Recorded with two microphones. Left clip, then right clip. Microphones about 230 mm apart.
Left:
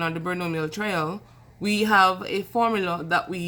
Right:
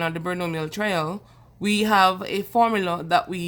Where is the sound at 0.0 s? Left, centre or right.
Right.